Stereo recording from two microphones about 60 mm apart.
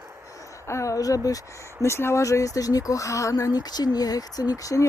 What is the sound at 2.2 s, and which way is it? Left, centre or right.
Speech, left.